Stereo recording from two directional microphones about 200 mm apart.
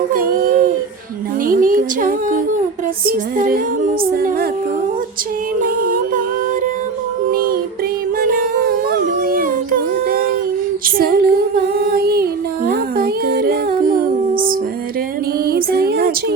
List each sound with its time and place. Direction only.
0.1 s a sound: 45° right (ahead or behind)
1.5 s music: 45° right (ahead or behind)
5.6 s music: 45° right (ahead or behind)
7.3 s music: 45° right (ahead or behind)